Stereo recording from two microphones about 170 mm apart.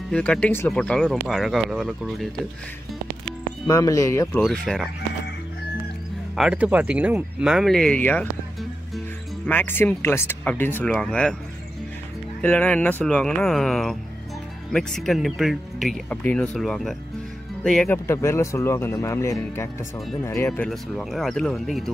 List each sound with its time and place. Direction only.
0.1 s speech: 5° left (ahead or behind)
3.6 s speech: 20° left (ahead or behind)
4.5 s speech: centre (ahead or behind)
6.3 s speech: 5° right (ahead or behind)
9.5 s speech: 10° left (ahead or behind)
12.4 s speech: 10° left (ahead or behind)